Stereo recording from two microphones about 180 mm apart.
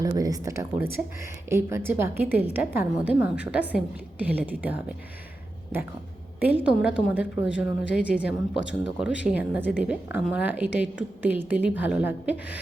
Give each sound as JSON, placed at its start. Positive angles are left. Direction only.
{"t": 0.0, "sound": "speech", "side_deg": -20}
{"t": 6.4, "sound": "speech", "side_deg": -10}
{"t": 8.5, "sound": "speech", "side_deg": 75}
{"t": 9.0, "sound": "speech", "side_deg": -5}